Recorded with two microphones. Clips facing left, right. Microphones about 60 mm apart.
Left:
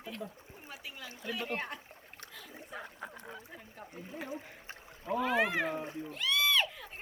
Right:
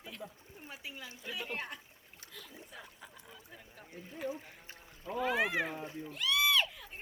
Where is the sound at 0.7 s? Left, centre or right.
Centre.